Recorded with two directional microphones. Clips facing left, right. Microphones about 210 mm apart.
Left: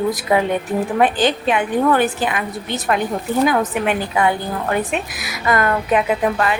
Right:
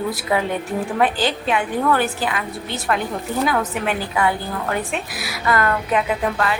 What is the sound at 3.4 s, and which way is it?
A woman's voice, 20° left (ahead or behind).